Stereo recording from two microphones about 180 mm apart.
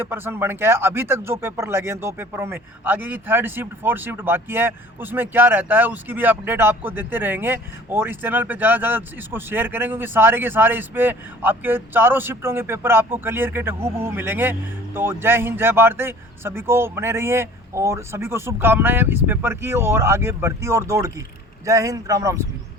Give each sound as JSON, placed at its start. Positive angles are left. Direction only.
{"t": 0.0, "sound": "a man's voice", "side_deg": -15}